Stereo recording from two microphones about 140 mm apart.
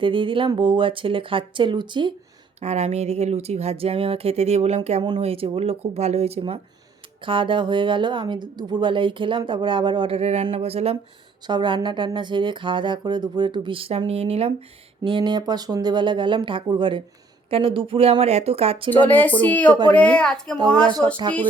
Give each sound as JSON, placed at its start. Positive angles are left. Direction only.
{"t": 0.0, "sound": "a woman's voice", "side_deg": -35}
{"t": 2.6, "sound": "a woman's voice", "side_deg": -50}
{"t": 11.4, "sound": "a woman's voice", "side_deg": -35}
{"t": 15.0, "sound": "a woman's voice", "side_deg": -35}
{"t": 18.9, "sound": "speech", "side_deg": 15}